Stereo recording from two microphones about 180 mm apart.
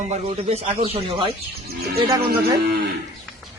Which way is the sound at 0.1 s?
35° right (ahead or behind).